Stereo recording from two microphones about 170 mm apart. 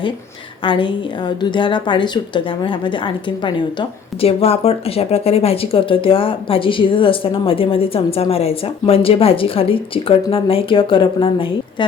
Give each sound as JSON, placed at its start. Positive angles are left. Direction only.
{"t": 0.6, "sound": "a woman's voice", "side_deg": 30}